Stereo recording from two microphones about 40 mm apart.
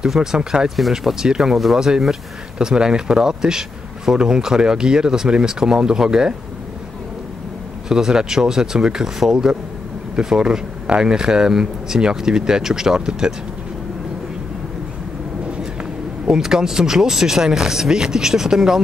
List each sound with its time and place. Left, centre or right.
0.1 s speech: centre
0.7 s speech: centre
1.2 s speech: centre
7.9 s speech: centre
16.3 s speech: centre